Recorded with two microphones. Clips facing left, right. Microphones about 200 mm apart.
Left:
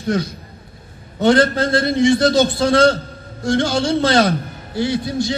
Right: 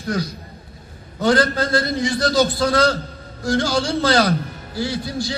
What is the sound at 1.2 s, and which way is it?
A man's voice, 25° left (ahead or behind).